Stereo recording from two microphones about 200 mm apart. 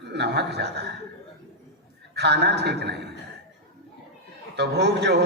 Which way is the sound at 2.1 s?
55° right (ahead or behind).